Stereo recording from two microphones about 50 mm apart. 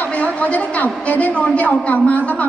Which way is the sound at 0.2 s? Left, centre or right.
Left.